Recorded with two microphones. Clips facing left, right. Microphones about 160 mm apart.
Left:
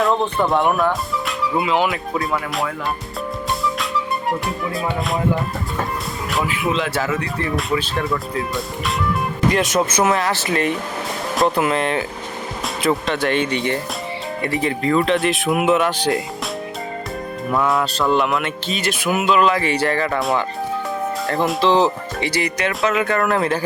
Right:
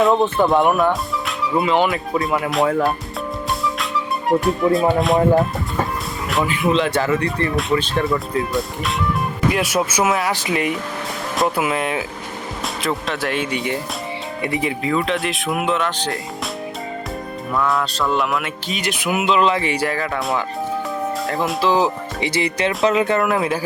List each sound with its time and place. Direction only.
0.0 s speech: centre (ahead or behind)
3.8 s music: centre (ahead or behind)
4.9 s speech: centre (ahead or behind)
6.3 s speech: 5° left (ahead or behind)
17.7 s speech: centre (ahead or behind)
18.7 s speech: 15° right (ahead or behind)
19.7 s speech: 10° right (ahead or behind)
22.3 s speech: 25° right (ahead or behind)
23.2 s speech: 5° right (ahead or behind)